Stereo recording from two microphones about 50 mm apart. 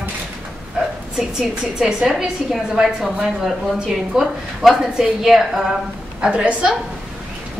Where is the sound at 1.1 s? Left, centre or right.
Centre.